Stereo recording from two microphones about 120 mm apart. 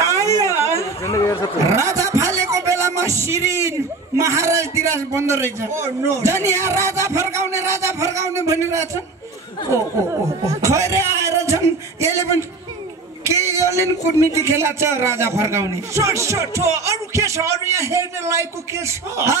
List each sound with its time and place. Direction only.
0.0 s a sound: 25° right (ahead or behind)
1.0 s speech: 25° left (ahead or behind)
1.7 s speech: 25° right (ahead or behind)